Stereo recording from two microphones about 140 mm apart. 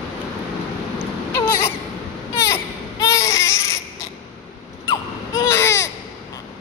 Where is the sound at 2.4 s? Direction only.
25° left (ahead or behind).